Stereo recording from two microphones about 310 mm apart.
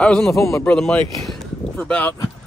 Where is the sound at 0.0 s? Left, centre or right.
Centre.